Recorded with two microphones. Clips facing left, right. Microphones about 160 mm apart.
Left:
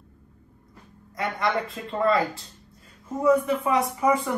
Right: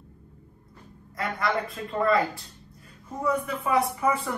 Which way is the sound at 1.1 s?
25° left (ahead or behind).